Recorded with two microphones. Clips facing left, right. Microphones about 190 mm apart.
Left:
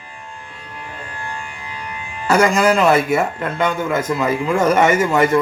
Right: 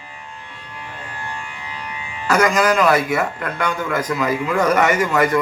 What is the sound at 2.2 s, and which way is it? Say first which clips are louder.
A man's voice: left 2 dB; 30° left (ahead or behind).